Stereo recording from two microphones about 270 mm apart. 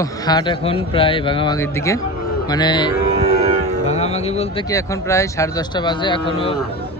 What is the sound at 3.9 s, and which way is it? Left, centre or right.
Music, left.